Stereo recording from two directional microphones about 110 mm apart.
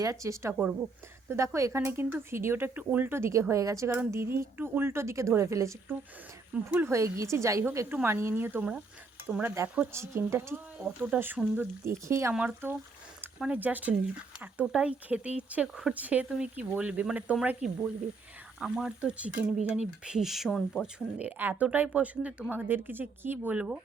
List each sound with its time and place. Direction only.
0.0 s speech: 30° right (ahead or behind)
6.5 s a woman's voice: 10° right (ahead or behind)
6.8 s speech: 25° right (ahead or behind)
10.8 s a woman's voice: 10° right (ahead or behind)
12.3 s a woman's voice: 10° right (ahead or behind)
20.8 s a woman's voice: 15° right (ahead or behind)